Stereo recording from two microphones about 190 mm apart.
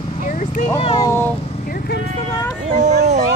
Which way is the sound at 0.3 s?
40° left (ahead or behind).